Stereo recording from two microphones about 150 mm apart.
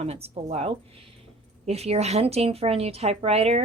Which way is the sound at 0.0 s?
45° right (ahead or behind).